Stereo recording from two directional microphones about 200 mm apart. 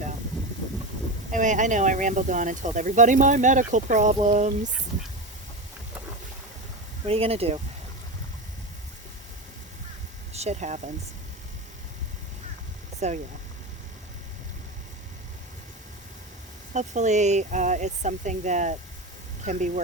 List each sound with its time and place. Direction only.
1.3 s speech: 40° right (ahead or behind)
7.1 s speech: 30° right (ahead or behind)
10.3 s speech: 35° right (ahead or behind)
13.0 s speech: 35° right (ahead or behind)
16.7 s speech: 35° right (ahead or behind)